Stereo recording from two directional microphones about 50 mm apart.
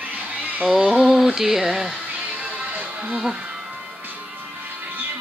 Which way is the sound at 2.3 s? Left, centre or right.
Right.